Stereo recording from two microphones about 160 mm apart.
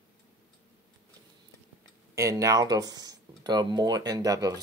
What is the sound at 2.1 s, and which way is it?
Speech, 20° right (ahead or behind).